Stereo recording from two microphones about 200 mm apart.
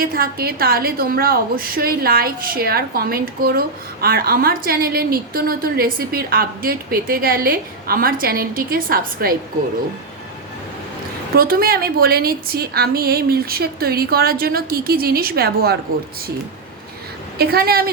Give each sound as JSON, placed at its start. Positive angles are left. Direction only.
{"t": 0.0, "sound": "a woman's voice", "side_deg": -45}
{"t": 11.3, "sound": "a woman's voice", "side_deg": -50}
{"t": 17.3, "sound": "a woman's voice", "side_deg": -50}